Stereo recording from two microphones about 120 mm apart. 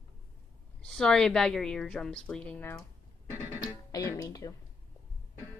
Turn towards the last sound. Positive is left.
turn(degrees=30)  # may be behind; listen again after turning